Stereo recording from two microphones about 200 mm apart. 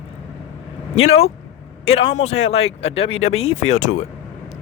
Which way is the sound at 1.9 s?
30° left (ahead or behind).